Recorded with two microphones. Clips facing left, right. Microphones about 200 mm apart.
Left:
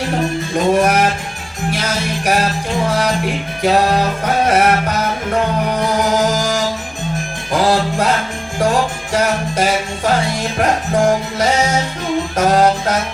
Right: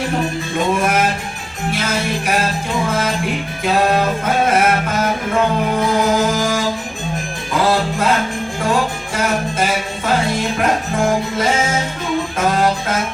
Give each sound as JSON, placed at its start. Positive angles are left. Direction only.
{"t": 0.5, "sound": "music", "side_deg": 40}
{"t": 9.1, "sound": "music", "side_deg": 45}